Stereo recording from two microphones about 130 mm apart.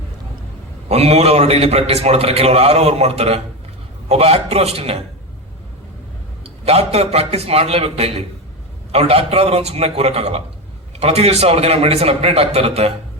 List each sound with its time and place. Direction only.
0.9 s a man's voice: 50° right (ahead or behind)
6.7 s a man's voice: 50° right (ahead or behind)